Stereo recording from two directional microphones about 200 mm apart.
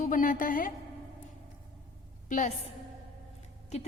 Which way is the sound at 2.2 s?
40° left (ahead or behind).